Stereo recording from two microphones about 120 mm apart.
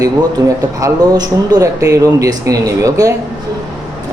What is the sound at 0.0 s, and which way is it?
Speech, 25° right (ahead or behind).